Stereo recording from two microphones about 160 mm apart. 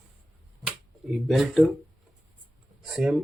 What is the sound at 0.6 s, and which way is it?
Finger snapping, centre (ahead or behind).